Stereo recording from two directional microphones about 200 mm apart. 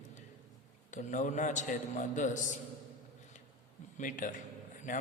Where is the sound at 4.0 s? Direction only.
40° left (ahead or behind).